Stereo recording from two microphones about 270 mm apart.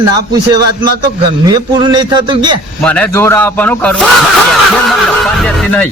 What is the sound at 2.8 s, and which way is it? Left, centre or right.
Speech, centre.